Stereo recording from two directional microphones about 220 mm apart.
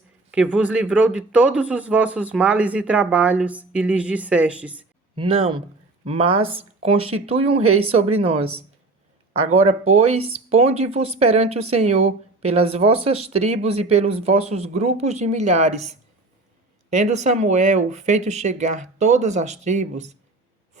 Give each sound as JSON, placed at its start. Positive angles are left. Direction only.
{"t": 0.3, "sound": "speech", "side_deg": -5}
{"t": 5.1, "sound": "speech", "side_deg": -25}
{"t": 9.9, "sound": "speech", "side_deg": -30}
{"t": 16.9, "sound": "speech", "side_deg": -30}